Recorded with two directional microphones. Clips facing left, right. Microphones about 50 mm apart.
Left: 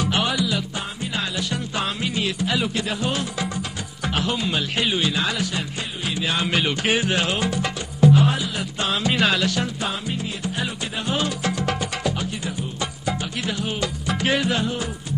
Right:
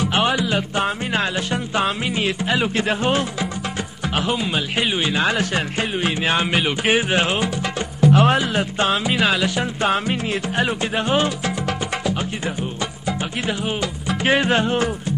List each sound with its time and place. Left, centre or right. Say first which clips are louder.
0.1 s music: right 3 dB; right
0.7 s music: right 7 dB; right
1.5 s speech: right 5 dB; right
4.1 s speech: right 2 dB; centre
5.1 s speech: right 5 dB; right
5.5 s music: right 7 dB; right
6.5 s speech: right 3 dB; centre
8.1 s speech: right 5 dB; right
8.5 s speech: right 6 dB; right
9.0 s music: right 1 dB; centre
9.8 s speech: right 7 dB; right
13.5 s speech: right 1 dB; right